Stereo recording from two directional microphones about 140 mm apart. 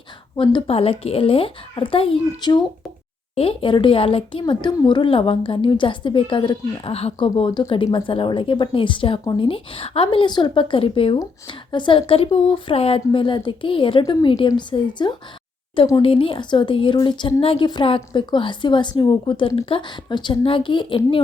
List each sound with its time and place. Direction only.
0.7 s a woman's voice: 45° left (ahead or behind)